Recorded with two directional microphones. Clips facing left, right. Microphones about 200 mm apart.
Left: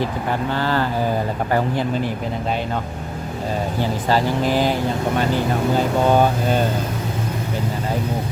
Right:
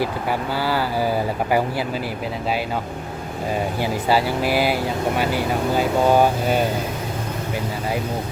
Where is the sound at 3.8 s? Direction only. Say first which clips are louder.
Left 1 dB; 10° right (ahead or behind).